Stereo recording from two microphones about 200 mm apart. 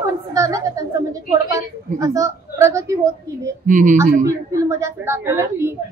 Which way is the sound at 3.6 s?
40° right (ahead or behind).